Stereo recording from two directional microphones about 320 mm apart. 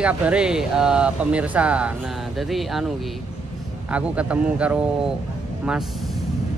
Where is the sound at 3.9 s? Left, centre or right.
Centre.